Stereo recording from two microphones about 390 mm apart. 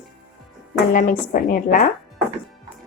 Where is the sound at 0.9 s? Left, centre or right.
Centre.